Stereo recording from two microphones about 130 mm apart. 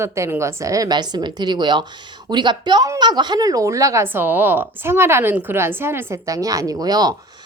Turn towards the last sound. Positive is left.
turn(degrees=-30)  # may be behind; listen again after turning